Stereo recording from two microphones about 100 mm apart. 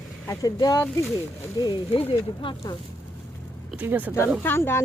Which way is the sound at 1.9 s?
65° left (ahead or behind).